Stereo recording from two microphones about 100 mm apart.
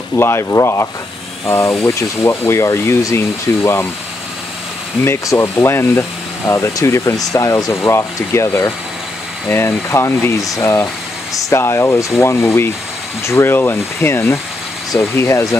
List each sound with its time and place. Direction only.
0.2 s speech: 25° left (ahead or behind)
5.0 s speech: 30° left (ahead or behind)